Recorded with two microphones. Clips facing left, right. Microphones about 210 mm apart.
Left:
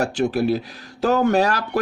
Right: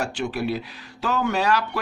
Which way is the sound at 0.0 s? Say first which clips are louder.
Left 6 dB; 40° left (ahead or behind).